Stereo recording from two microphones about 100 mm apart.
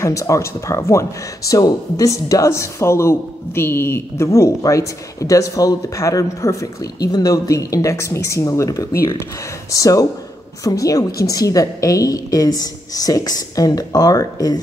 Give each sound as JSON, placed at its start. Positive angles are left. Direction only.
{"t": 0.0, "sound": "speech", "side_deg": 30}